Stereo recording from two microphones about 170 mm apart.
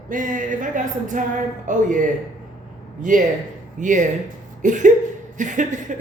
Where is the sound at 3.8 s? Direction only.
50° right (ahead or behind).